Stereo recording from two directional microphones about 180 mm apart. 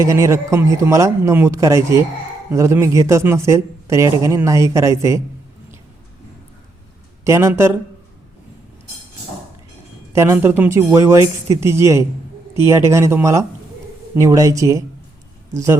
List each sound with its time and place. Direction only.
0.0 s speech: 15° right (ahead or behind)
7.3 s speech: 15° right (ahead or behind)
10.2 s speech: 15° right (ahead or behind)